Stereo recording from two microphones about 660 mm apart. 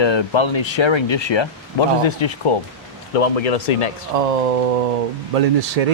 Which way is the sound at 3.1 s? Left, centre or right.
Left.